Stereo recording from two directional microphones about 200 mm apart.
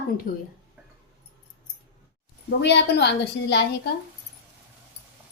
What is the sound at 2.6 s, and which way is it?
A woman's voice, 55° left (ahead or behind).